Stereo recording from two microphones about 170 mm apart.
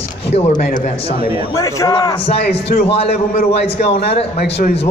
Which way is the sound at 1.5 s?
20° left (ahead or behind).